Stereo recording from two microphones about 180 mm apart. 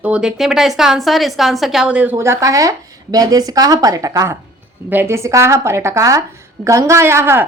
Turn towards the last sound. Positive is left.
turn(degrees=-15)  # may be behind; listen again after turning